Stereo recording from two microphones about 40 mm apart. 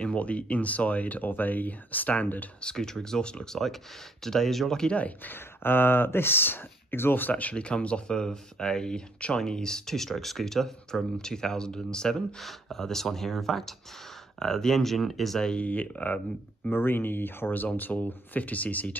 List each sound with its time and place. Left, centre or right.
0.0 s speech: left
2.6 s speech: centre
4.2 s speech: centre
5.2 s speech: left
7.5 s speech: left
12.4 s speech: centre
15.6 s speech: left
16.7 s speech: left